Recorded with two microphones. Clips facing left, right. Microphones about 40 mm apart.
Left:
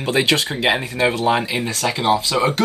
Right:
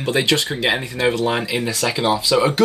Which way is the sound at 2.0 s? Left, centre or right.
Centre.